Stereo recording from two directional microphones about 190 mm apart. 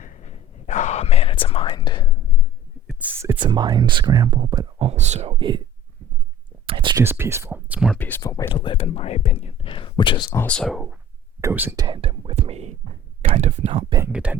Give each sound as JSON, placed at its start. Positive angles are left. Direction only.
{"t": 0.0, "sound": "whispering", "side_deg": 40}
{"t": 3.2, "sound": "speech", "side_deg": -15}
{"t": 6.7, "sound": "a sound", "side_deg": -25}
{"t": 7.0, "sound": "speech", "side_deg": -10}
{"t": 7.9, "sound": "speech", "side_deg": 15}
{"t": 8.6, "sound": "speech", "side_deg": 25}
{"t": 10.4, "sound": "speech", "side_deg": 5}
{"t": 11.3, "sound": "speech", "side_deg": -10}
{"t": 11.9, "sound": "whispering", "side_deg": -30}
{"t": 13.2, "sound": "speech", "side_deg": -35}
{"t": 14.1, "sound": "speech", "side_deg": -5}